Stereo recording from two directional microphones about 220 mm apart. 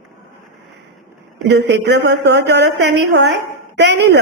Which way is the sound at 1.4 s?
50° right (ahead or behind).